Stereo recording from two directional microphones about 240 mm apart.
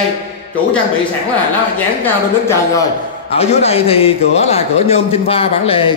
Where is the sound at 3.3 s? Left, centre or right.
Left.